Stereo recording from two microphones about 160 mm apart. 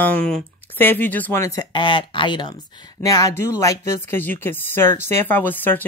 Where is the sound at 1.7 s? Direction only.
30° left (ahead or behind).